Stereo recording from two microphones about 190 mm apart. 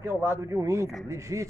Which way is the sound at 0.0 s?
15° right (ahead or behind).